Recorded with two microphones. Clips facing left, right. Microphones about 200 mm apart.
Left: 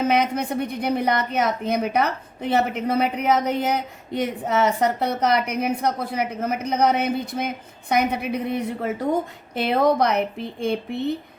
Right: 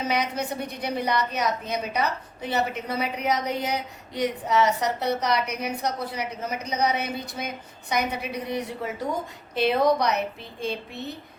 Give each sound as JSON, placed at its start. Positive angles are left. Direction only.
{"t": 0.0, "sound": "a woman's voice", "side_deg": 55}